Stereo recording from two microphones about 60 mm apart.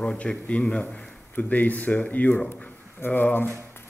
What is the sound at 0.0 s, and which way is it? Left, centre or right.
A man's voice, centre.